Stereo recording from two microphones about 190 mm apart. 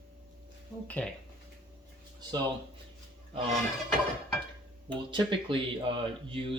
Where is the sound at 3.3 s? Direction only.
30° right (ahead or behind).